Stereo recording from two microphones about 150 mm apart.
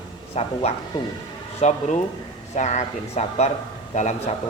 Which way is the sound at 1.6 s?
50° left (ahead or behind).